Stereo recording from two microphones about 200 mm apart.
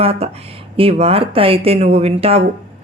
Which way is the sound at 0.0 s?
30° right (ahead or behind).